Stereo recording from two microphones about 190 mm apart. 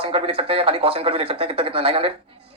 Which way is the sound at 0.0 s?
30° right (ahead or behind).